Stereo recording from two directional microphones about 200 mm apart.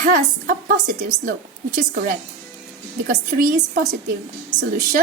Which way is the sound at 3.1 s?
45° right (ahead or behind).